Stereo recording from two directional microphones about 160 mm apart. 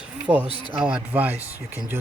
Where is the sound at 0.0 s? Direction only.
5° right (ahead or behind).